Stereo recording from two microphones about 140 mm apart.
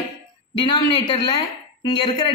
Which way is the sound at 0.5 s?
35° left (ahead or behind).